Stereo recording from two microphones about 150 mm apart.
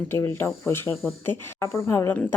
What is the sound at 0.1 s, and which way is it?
A woman's voice, 15° left (ahead or behind).